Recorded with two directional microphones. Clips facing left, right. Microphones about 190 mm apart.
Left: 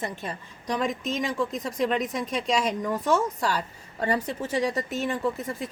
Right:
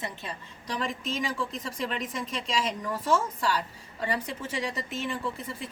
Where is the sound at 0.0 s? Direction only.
50° left (ahead or behind).